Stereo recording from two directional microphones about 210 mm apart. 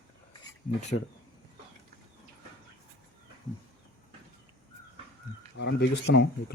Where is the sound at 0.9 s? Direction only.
55° left (ahead or behind).